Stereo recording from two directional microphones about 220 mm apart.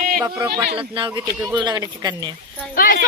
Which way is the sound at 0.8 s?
20° right (ahead or behind).